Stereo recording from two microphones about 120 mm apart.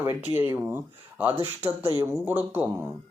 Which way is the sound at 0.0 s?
15° right (ahead or behind).